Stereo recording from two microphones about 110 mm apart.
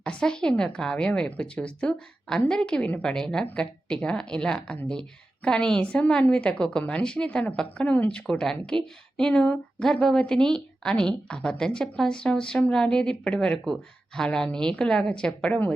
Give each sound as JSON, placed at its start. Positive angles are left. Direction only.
{"t": 0.0, "sound": "speech", "side_deg": 10}